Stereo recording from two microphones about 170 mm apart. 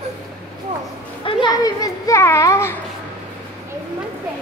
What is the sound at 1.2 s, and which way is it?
Children playing, 25° left (ahead or behind).